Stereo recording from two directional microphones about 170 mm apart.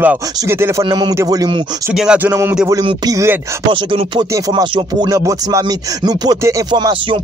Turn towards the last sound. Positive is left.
turn(degrees=-25)  # may be behind; listen again after turning